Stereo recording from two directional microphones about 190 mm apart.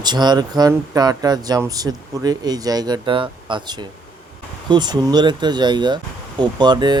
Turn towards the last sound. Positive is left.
turn(degrees=-20)  # may be behind; listen again after turning